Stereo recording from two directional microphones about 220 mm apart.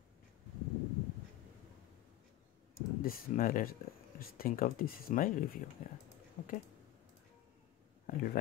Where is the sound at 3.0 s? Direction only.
40° left (ahead or behind).